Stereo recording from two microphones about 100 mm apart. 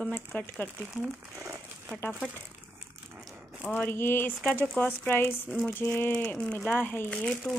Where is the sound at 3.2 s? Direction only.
Centre (ahead or behind).